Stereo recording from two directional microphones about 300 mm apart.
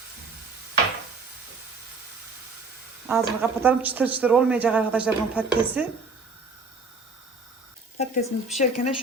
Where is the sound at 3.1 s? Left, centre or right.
Centre.